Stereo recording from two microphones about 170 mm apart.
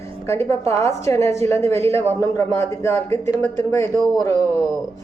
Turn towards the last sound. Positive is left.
turn(degrees=15)  # may be behind; listen again after turning